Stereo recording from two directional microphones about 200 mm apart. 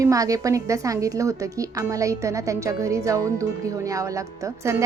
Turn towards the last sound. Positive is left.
turn(degrees=-15)  # may be behind; listen again after turning